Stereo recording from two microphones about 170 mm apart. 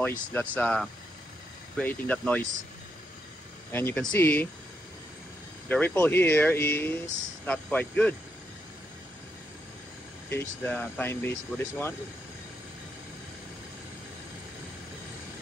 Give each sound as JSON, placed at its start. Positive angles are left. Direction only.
{"t": 0.0, "sound": "speech", "side_deg": 10}
{"t": 3.7, "sound": "speech", "side_deg": 10}
{"t": 5.7, "sound": "speech", "side_deg": 10}
{"t": 10.3, "sound": "speech", "side_deg": 15}